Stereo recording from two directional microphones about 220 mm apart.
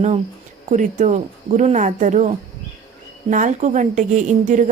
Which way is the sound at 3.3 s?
35° right (ahead or behind).